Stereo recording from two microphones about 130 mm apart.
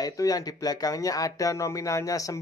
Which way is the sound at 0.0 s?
30° left (ahead or behind).